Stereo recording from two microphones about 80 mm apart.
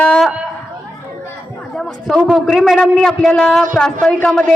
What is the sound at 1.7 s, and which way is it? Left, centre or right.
A man's voice, centre.